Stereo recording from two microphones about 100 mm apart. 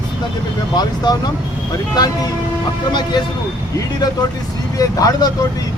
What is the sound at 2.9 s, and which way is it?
Speech, 50° left (ahead or behind).